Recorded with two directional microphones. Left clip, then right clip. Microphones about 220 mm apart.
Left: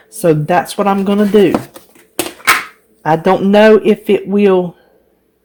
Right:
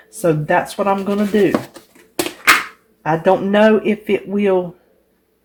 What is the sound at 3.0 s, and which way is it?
Speech, 40° left (ahead or behind).